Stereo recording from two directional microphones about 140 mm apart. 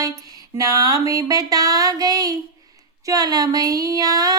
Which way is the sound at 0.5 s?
25° right (ahead or behind).